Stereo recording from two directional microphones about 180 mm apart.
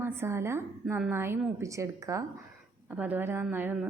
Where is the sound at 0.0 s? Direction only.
15° right (ahead or behind).